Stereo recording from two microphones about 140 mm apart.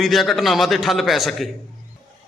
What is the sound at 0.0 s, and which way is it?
A man's voice, centre (ahead or behind).